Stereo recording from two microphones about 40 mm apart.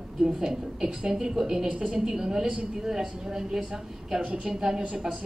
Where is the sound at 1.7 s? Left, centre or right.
Right.